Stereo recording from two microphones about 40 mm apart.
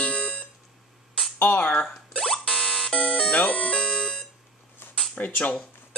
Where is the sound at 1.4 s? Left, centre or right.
Left.